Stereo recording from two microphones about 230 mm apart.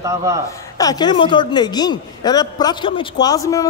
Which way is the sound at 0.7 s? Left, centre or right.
Centre.